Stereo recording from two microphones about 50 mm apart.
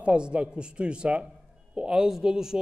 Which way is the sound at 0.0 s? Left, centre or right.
Right.